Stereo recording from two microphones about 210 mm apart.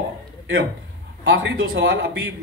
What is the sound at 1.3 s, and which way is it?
Speech, 70° right (ahead or behind).